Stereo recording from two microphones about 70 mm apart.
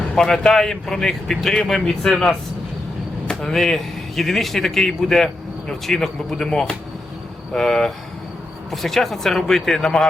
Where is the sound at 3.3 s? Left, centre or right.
Centre.